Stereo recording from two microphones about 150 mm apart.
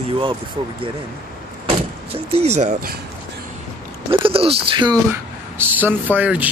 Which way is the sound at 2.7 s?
90° right.